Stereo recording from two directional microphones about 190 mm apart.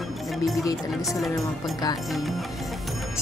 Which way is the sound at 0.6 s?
15° left (ahead or behind).